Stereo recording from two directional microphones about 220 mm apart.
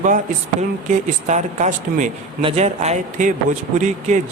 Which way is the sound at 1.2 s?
35° right (ahead or behind).